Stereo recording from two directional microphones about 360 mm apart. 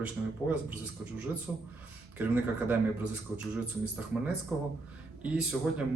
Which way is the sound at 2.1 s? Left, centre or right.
Centre.